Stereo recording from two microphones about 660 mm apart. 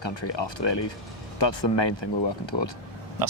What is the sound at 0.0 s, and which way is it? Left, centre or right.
Speech, left.